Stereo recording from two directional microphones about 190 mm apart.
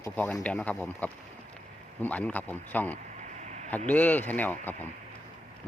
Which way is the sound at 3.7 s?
10° left (ahead or behind).